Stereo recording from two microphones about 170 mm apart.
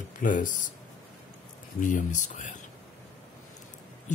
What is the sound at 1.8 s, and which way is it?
Speech, 50° left (ahead or behind).